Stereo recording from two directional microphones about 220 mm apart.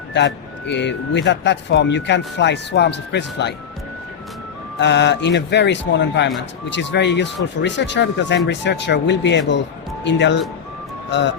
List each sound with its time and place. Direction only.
0.1 s speech: 55° left (ahead or behind)
4.8 s speech: 55° left (ahead or behind)